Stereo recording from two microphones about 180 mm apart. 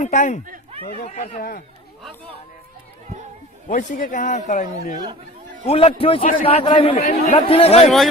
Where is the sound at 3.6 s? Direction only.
45° left (ahead or behind).